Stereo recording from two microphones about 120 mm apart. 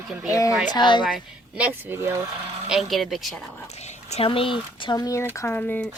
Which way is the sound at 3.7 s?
65° left (ahead or behind).